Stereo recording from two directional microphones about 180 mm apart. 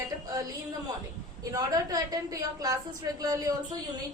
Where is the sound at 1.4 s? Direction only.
20° right (ahead or behind).